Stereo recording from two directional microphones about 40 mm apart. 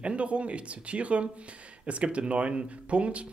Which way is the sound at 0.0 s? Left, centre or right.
Right.